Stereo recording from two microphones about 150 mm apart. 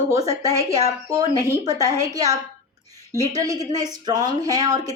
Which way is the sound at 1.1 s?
25° right (ahead or behind).